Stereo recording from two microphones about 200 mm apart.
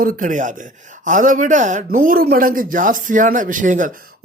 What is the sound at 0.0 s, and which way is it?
A man's voice, 45° right (ahead or behind).